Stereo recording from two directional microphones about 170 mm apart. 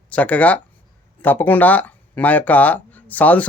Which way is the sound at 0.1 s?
10° left (ahead or behind).